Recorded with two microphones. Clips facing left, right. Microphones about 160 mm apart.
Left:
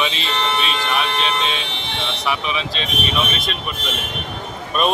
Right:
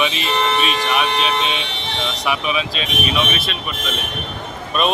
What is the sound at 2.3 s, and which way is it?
Speech, 10° right (ahead or behind).